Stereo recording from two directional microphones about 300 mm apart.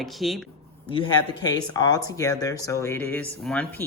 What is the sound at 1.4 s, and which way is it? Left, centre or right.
Speech, centre.